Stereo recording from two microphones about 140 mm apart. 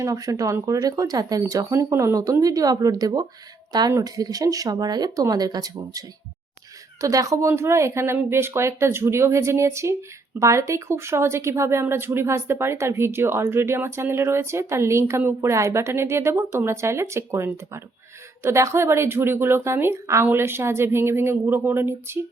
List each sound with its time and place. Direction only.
0.0 s speech: 25° right (ahead or behind)